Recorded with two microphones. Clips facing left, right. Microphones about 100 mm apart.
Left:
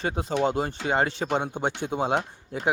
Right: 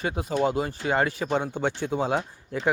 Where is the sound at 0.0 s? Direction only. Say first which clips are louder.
Even; 30° left (ahead or behind).